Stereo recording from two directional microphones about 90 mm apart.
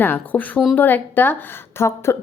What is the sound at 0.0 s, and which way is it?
A woman's voice, 20° left (ahead or behind).